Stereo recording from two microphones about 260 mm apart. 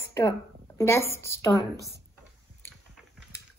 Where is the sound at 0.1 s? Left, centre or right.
Centre.